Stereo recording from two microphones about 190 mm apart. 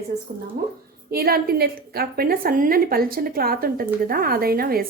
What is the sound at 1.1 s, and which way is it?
A woman's voice, 50° right (ahead or behind).